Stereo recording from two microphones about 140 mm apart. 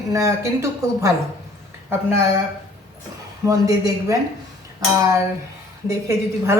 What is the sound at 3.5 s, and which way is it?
Speech, 25° right (ahead or behind).